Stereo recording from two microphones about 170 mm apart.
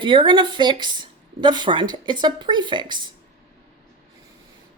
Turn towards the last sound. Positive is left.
turn(degrees=-25)  # may be behind; listen again after turning